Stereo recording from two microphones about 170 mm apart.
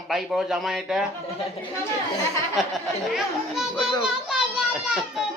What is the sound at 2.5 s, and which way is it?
A child's voice, centre (ahead or behind).